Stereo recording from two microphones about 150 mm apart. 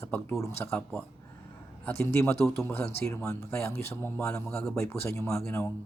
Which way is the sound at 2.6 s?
15° left (ahead or behind).